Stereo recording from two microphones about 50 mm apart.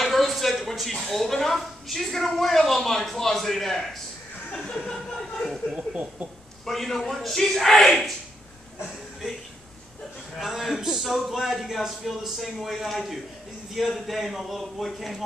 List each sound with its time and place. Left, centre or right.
0.0 s speech: centre
4.9 s speech: centre
5.8 s speech: right
6.6 s speech: centre
10.3 s speech: centre